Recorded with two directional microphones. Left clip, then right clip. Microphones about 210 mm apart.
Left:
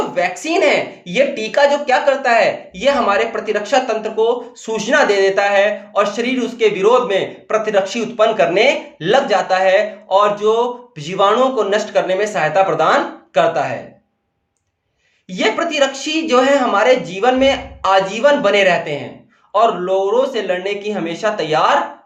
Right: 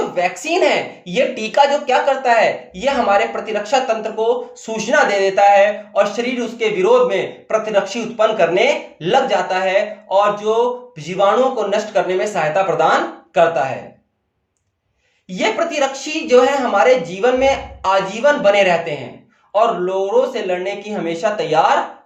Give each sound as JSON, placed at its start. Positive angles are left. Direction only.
{"t": 0.1, "sound": "a woman's voice", "side_deg": 30}
{"t": 15.3, "sound": "a woman's voice", "side_deg": 30}